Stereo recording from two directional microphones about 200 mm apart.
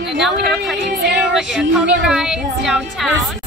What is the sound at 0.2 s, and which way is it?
Speech, centre (ahead or behind).